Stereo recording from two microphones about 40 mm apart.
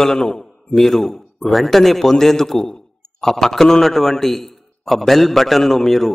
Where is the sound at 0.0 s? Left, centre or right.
Centre.